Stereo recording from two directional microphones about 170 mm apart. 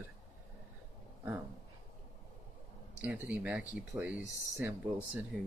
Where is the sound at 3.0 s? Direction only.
10° right (ahead or behind).